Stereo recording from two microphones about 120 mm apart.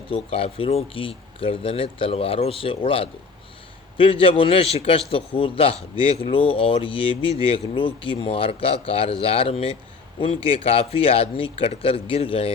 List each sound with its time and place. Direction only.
0.1 s a man's voice: 55° left (ahead or behind)